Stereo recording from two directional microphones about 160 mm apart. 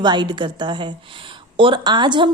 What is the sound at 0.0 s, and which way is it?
A woman's voice, 30° right (ahead or behind).